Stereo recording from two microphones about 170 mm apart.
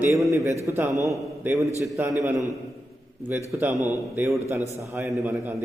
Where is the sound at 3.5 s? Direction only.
15° right (ahead or behind).